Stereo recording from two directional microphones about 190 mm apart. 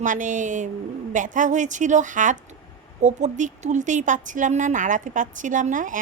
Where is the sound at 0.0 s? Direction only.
40° right (ahead or behind).